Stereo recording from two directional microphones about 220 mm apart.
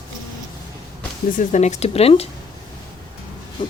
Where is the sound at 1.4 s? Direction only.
30° left (ahead or behind).